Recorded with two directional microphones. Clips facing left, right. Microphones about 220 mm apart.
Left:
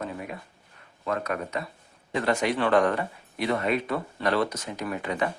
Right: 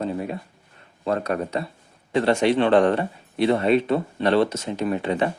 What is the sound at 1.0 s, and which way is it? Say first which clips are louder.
Speech: right 5 dB; 30° right (ahead or behind).